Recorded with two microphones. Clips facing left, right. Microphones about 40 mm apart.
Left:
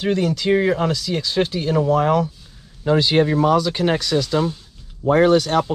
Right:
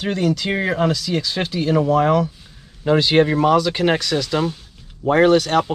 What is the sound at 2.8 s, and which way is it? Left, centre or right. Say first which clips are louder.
Speech: right 1 dB; right.